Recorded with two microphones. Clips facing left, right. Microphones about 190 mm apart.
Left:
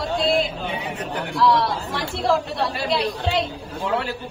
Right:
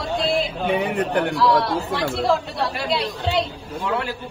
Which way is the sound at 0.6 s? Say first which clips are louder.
Right 7 dB; 60° right (ahead or behind).